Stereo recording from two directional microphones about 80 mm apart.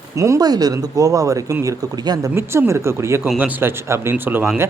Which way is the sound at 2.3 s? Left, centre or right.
Right.